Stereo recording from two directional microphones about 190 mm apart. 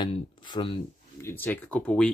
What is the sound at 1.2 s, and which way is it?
Speech, 10° left (ahead or behind).